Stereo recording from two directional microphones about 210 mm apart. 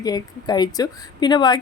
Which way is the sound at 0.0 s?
20° left (ahead or behind).